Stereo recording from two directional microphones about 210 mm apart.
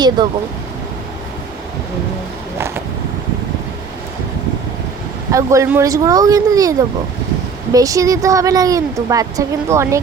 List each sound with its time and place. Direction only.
0.2 s speech: 20° right (ahead or behind)
2.6 s vehicle: 10° right (ahead or behind)
5.3 s a woman's voice: 15° right (ahead or behind)